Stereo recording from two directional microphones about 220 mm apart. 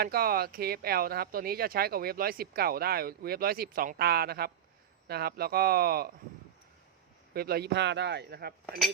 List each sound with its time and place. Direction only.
0.0 s speech: 40° right (ahead or behind)
7.3 s speech: 45° right (ahead or behind)